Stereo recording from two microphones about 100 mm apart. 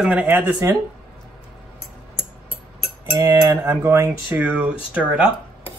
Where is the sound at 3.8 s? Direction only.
25° right (ahead or behind).